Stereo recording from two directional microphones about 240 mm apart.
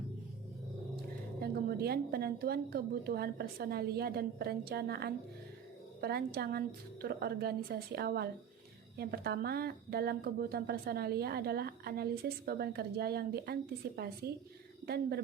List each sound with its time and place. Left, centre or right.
1.4 s a woman's voice: right